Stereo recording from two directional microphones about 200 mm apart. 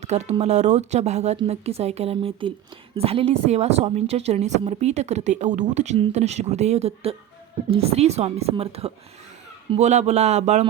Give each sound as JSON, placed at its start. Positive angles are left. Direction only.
{"t": 0.0, "sound": "a woman's voice", "side_deg": -35}